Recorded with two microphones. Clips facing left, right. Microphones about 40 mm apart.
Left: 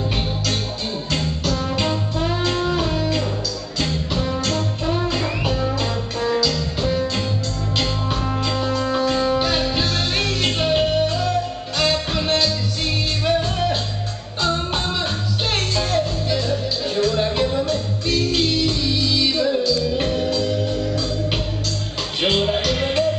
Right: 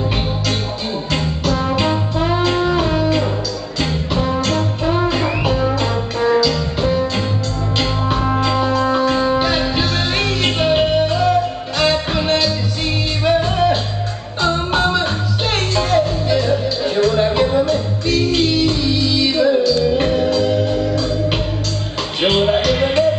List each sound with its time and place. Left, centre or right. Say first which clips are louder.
1.1 s music: right 4 dB; centre